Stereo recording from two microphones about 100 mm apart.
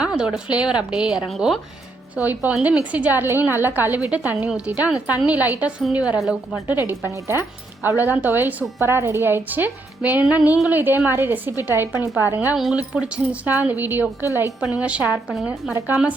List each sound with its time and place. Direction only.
0.0 s a woman's voice: 5° right (ahead or behind)
2.1 s a woman's voice: 15° right (ahead or behind)
6.7 s a woman's voice: 20° right (ahead or behind)